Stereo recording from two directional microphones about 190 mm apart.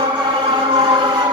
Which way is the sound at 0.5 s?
25° right (ahead or behind).